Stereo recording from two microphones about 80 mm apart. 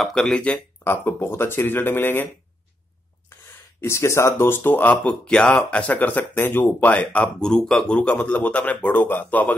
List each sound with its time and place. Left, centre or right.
0.0 s speech: centre
0.8 s speech: left
3.8 s speech: left
5.0 s speech: centre